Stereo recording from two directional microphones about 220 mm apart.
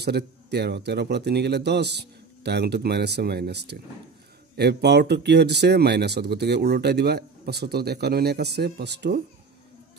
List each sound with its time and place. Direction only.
0.0 s speech: 50° right (ahead or behind)